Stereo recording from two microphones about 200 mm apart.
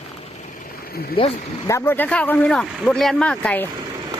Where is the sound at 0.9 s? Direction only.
50° left (ahead or behind).